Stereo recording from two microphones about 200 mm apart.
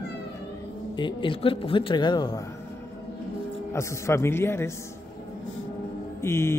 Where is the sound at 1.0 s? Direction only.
25° left (ahead or behind).